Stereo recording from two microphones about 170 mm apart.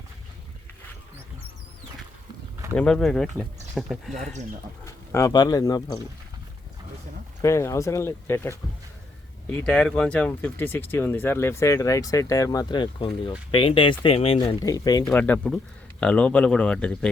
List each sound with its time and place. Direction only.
2.7 s speech: 5° left (ahead or behind)
4.9 s speech: 20° left (ahead or behind)
7.4 s speech: 15° left (ahead or behind); by 14.5 s 35° left (ahead or behind)
14.6 s speech: 20° left (ahead or behind)
15.1 s speech: 10° left (ahead or behind)